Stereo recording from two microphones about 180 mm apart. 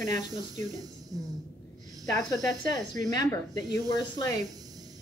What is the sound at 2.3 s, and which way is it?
Speech, centre (ahead or behind).